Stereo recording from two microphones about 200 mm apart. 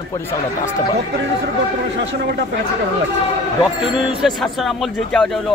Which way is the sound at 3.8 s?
5° right (ahead or behind).